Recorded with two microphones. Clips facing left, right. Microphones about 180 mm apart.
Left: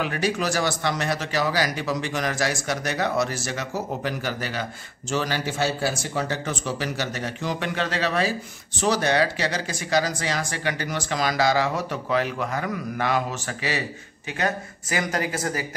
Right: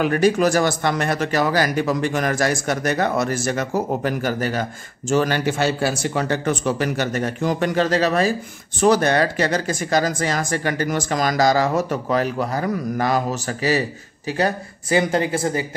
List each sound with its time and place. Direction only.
0.0 s a man's voice: 50° right (ahead or behind); by 15.6 s 25° right (ahead or behind)